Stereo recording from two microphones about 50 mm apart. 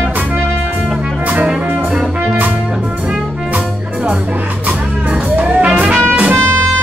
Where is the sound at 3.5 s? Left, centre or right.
Right.